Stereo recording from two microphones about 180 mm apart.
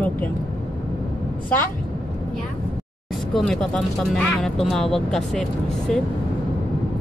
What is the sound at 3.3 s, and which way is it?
Speech, centre (ahead or behind).